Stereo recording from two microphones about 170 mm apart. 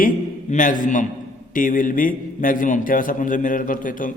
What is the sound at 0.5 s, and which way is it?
A man's voice, 50° left (ahead or behind).